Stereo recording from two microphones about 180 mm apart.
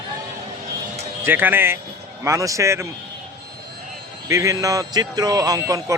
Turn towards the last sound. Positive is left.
turn(degrees=-20)  # may be behind; listen again after turning